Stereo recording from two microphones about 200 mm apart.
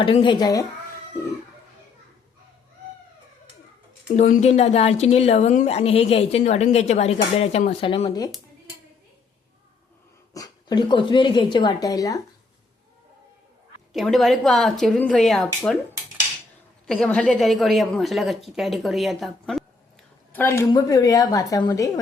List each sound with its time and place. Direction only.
0.0 s speech: 25° left (ahead or behind)
4.2 s a woman's voice: 35° left (ahead or behind)
10.3 s speech: 20° left (ahead or behind)
13.9 s a woman's voice: centre (ahead or behind)
16.8 s a woman's voice: 5° left (ahead or behind)
20.3 s a woman's voice: 10° left (ahead or behind)